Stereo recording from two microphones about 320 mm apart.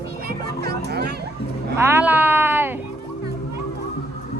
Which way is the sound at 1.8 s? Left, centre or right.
Centre.